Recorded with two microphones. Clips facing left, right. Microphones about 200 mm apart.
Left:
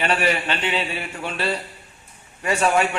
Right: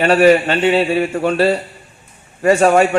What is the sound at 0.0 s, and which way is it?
A man's voice, 40° right (ahead or behind).